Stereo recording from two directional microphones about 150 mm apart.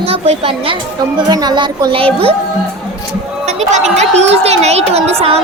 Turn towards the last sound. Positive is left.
turn(degrees=-40)  # may be behind; listen again after turning